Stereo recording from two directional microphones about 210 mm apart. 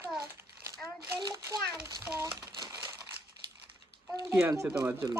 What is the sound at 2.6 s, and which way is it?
Crushing, 20° right (ahead or behind).